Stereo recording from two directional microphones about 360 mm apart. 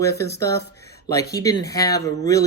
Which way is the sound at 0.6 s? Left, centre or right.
Left.